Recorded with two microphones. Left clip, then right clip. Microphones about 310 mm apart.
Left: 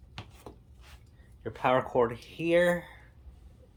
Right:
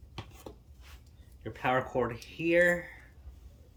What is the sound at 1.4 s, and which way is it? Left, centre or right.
Speech, centre.